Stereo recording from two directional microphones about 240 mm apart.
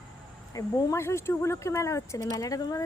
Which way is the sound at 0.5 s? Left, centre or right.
Centre.